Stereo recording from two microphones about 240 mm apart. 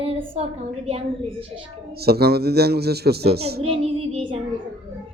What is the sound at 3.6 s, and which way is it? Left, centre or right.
Child singing, right.